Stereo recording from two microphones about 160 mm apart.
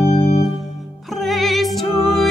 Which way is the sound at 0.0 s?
40° left (ahead or behind).